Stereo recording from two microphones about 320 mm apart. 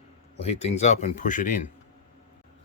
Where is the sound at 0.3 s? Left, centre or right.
Centre.